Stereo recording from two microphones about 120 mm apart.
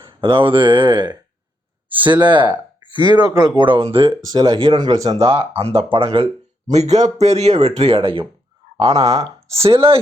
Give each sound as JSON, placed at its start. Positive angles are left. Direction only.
{"t": 0.2, "sound": "speech", "side_deg": -50}
{"t": 4.1, "sound": "speech", "side_deg": -35}
{"t": 5.1, "sound": "speech", "side_deg": -55}
{"t": 8.6, "sound": "a sound", "side_deg": -45}
{"t": 9.0, "sound": "speech", "side_deg": -30}
{"t": 9.5, "sound": "speech", "side_deg": -55}